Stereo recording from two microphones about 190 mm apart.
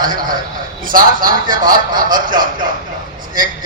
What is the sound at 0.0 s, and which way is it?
A man's voice, 45° right (ahead or behind).